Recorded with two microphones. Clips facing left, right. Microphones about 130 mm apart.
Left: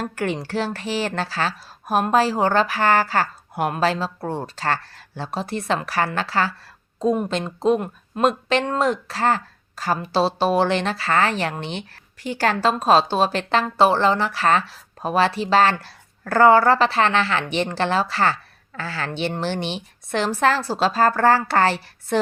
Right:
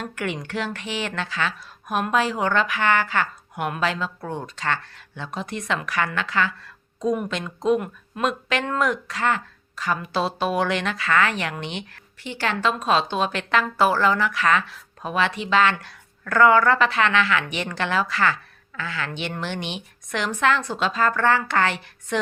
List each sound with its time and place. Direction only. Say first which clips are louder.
0.0 s a woman's voice: left 4 dB; 35° left (ahead or behind)